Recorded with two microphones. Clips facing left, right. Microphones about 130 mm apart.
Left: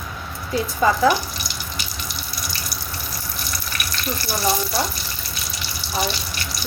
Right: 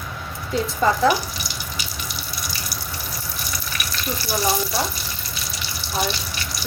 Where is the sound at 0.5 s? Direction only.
5° left (ahead or behind).